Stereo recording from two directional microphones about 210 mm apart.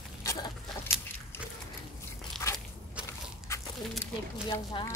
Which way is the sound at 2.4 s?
10° left (ahead or behind).